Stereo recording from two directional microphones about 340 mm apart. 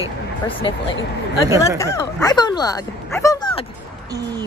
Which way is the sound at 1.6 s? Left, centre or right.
Centre.